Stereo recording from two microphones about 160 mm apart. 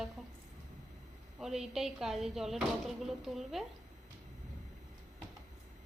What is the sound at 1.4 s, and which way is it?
Speech, 5° right (ahead or behind).